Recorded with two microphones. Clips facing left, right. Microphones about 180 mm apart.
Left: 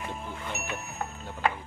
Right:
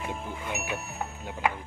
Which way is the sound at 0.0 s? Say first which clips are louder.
Right 2 dB; 15° right (ahead or behind).